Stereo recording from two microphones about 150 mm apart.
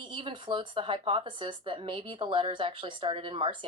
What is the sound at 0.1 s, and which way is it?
Speech, 35° right (ahead or behind).